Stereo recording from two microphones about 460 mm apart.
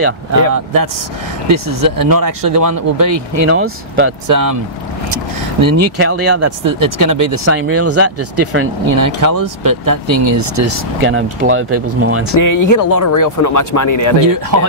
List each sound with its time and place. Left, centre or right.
1.5 s speech: right
4.3 s speech: right
12.4 s speech: left